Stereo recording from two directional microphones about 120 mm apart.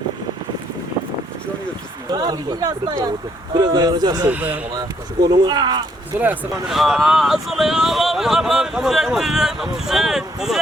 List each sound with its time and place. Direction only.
2.0 s speech: 35° right (ahead or behind)
4.3 s speech: 15° right (ahead or behind)
4.7 s speech: 35° right (ahead or behind)
6.1 s speech: 15° right (ahead or behind)
6.7 s speech: centre (ahead or behind)